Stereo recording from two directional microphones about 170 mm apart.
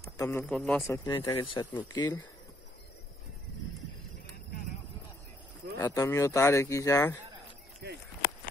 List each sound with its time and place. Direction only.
0.2 s speech: 15° left (ahead or behind)
1.1 s speech: 30° left (ahead or behind)
5.8 s speech: 20° left (ahead or behind)
7.8 s a sound: 75° right (ahead or behind)